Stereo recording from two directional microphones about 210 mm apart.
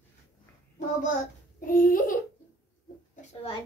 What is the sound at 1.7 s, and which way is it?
Speech, 40° left (ahead or behind).